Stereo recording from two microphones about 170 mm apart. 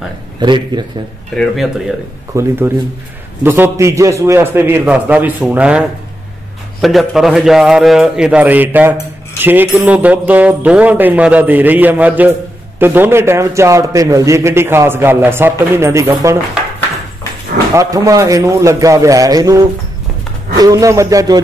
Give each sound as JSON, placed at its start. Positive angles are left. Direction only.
{"t": 0.4, "sound": "a man's voice", "side_deg": -25}
{"t": 1.3, "sound": "a man's voice", "side_deg": 0}
{"t": 2.3, "sound": "music", "side_deg": -15}
{"t": 6.8, "sound": "a man's voice", "side_deg": 0}
{"t": 9.4, "sound": "music", "side_deg": -10}
{"t": 17.7, "sound": "a man's voice", "side_deg": -20}